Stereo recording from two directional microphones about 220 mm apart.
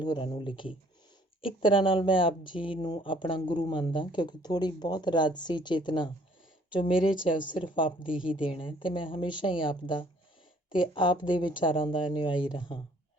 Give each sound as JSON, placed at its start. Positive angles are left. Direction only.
{"t": 0.0, "sound": "speech", "side_deg": 20}
{"t": 8.0, "sound": "a woman's voice", "side_deg": -5}
{"t": 8.4, "sound": "speech", "side_deg": 25}